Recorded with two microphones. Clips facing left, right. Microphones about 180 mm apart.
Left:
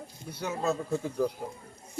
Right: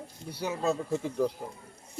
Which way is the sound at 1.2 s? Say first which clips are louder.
Right 1 dB; centre (ahead or behind).